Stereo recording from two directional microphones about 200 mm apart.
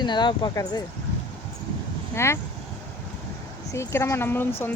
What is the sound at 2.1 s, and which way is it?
Speech, 15° left (ahead or behind).